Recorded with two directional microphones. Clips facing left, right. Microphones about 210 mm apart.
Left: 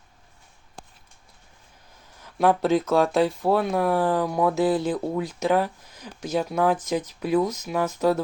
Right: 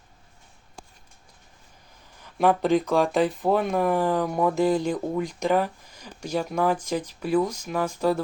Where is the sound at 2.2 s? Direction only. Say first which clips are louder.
Left 1 dB; centre (ahead or behind).